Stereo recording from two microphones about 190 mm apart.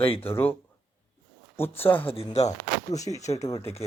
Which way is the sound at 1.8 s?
10° left (ahead or behind).